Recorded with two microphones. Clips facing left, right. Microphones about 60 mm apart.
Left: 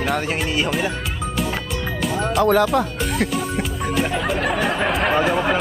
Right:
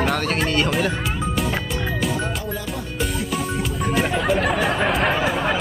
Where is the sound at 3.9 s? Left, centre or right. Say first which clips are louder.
Right 1 dB; centre.